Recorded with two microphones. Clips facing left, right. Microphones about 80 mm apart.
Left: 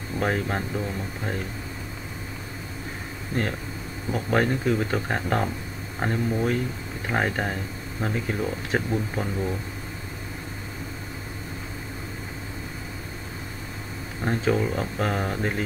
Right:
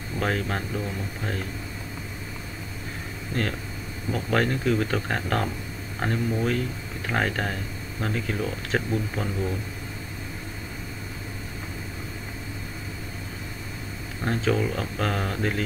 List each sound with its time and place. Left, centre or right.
0.2 s speech: centre
4.1 s speech: centre
14.2 s speech: centre